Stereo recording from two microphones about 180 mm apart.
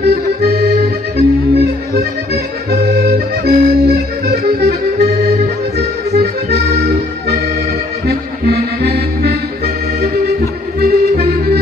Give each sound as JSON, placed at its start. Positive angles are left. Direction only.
{"t": 0.0, "sound": "accordion", "side_deg": -60}
{"t": 5.8, "sound": "accordion", "side_deg": -65}
{"t": 8.1, "sound": "music", "side_deg": -60}
{"t": 10.8, "sound": "music", "side_deg": -60}